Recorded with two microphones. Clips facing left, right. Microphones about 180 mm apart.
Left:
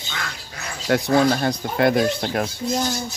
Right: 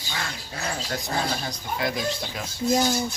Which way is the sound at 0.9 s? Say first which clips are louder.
Left 14 dB; 65° left (ahead or behind).